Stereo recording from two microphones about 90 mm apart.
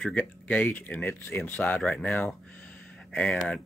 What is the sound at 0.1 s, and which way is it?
Speech, 15° left (ahead or behind).